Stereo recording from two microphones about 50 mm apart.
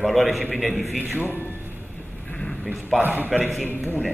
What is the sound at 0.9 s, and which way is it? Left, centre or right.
Speech, right.